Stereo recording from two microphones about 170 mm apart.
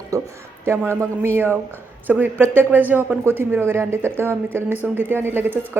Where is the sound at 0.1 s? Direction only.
20° right (ahead or behind).